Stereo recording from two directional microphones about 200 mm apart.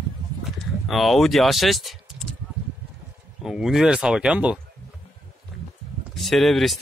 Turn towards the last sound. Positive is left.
turn(degrees=0)  # may be behind; listen again after turning